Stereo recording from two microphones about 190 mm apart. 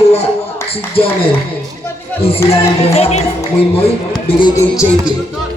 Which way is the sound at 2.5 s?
35° left (ahead or behind).